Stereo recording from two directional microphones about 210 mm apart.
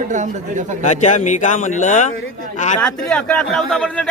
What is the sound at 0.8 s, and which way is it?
Speech, 35° left (ahead or behind).